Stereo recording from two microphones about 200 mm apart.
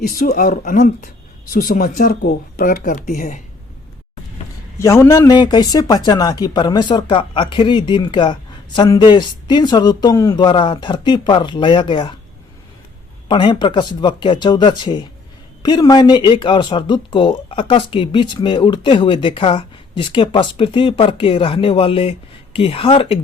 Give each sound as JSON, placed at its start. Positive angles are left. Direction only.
{"t": 0.0, "sound": "speech", "side_deg": 45}
{"t": 4.8, "sound": "speech", "side_deg": 15}
{"t": 13.2, "sound": "speech", "side_deg": 25}